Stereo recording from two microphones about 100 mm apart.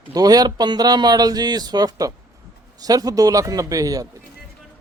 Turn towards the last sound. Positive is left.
turn(degrees=-35)  # may be behind; listen again after turning